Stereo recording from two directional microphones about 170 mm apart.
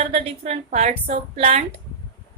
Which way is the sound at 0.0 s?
35° right (ahead or behind).